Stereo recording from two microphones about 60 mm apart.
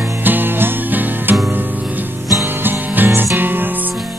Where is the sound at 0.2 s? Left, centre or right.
Right.